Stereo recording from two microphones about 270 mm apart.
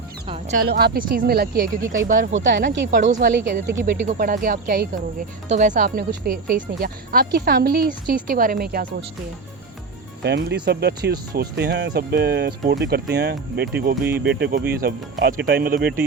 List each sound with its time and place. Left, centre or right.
0.3 s music: right
0.7 s speech: right
10.2 s speech: right